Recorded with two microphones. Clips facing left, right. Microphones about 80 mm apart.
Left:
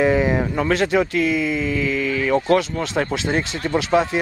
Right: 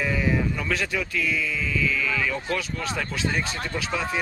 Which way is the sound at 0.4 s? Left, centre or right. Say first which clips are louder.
Left 7 dB; left.